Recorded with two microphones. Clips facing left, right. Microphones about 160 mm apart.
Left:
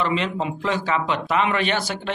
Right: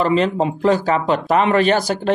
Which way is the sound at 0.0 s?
40° right (ahead or behind).